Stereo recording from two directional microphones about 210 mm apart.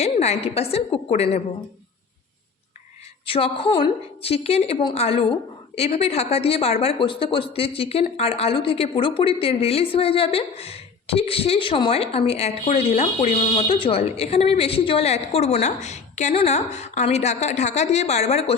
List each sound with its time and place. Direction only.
0.0 s speech: 30° left (ahead or behind)
3.2 s speech: 25° left (ahead or behind)